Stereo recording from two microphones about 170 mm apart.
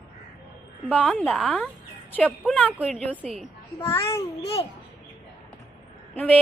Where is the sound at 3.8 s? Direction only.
15° left (ahead or behind).